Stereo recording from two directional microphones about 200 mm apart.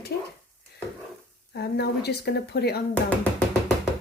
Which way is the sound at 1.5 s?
55° left (ahead or behind).